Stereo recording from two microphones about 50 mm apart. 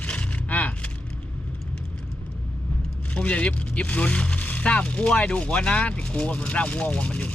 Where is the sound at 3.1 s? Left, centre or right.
Left.